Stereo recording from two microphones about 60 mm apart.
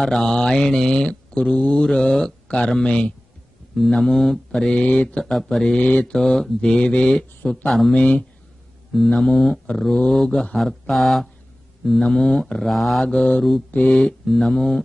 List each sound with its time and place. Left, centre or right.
0.0 s speech: centre
2.8 s mantra: centre
3.7 s mantra: centre
4.5 s speech: centre
5.2 s mantra: centre
5.8 s mantra: left
6.1 s speech: centre
7.6 s mantra: centre
7.9 s mantra: centre
8.9 s mantra: centre
13.0 s speech: centre
13.7 s mantra: centre